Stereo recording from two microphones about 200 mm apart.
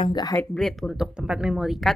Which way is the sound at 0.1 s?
20° left (ahead or behind).